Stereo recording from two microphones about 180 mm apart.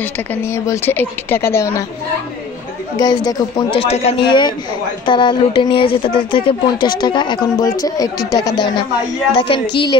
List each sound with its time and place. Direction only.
0.0 s speech: 10° left (ahead or behind)
3.0 s speech: 20° left (ahead or behind)
3.8 s speech: 35° left (ahead or behind)